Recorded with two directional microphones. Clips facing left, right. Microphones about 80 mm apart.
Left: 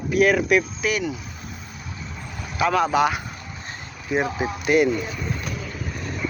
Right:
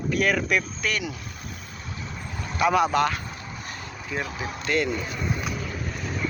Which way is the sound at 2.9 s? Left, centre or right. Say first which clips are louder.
Left 3 dB; centre.